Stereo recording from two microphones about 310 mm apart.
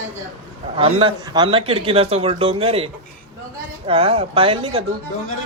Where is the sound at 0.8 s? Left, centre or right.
Centre.